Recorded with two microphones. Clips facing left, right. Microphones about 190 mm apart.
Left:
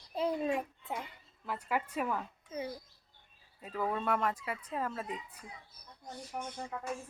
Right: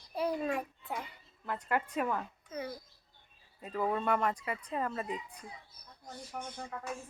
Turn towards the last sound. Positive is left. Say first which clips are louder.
# left 1 dB
turn(degrees=20)  # may be behind; listen again after turning